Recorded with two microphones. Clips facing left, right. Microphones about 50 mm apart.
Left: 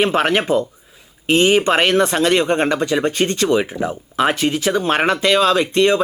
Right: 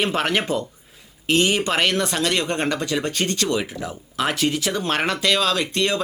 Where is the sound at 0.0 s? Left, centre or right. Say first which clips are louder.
Left 5 dB; centre.